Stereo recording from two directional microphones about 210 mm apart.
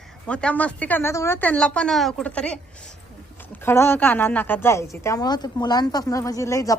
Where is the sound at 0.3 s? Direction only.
5° left (ahead or behind).